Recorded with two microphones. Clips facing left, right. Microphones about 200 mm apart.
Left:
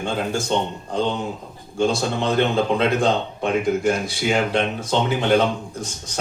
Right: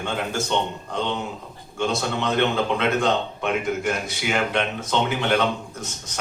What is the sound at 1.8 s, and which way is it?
A man's voice, 30° left (ahead or behind).